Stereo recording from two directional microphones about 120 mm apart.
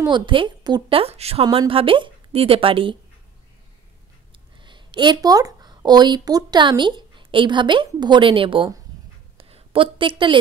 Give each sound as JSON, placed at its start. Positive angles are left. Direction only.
{"t": 0.0, "sound": "a woman's voice", "side_deg": -40}
{"t": 0.9, "sound": "a woman's voice", "side_deg": -55}
{"t": 4.6, "sound": "a woman's voice", "side_deg": -40}
{"t": 9.4, "sound": "a sound", "side_deg": -55}